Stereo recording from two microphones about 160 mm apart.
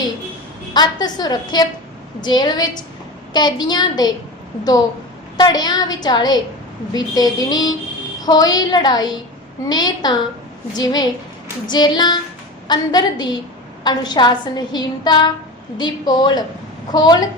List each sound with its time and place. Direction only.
0.7 s a woman's voice: 25° left (ahead or behind)
5.4 s a woman's voice: 25° left (ahead or behind)